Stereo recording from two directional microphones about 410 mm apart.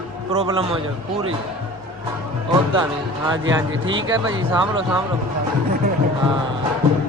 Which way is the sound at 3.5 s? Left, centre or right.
Right.